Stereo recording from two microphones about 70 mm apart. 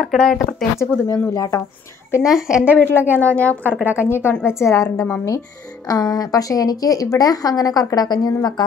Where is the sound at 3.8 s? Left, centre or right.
Right.